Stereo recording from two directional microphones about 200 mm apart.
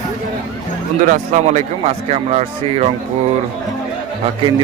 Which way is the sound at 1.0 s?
40° right (ahead or behind).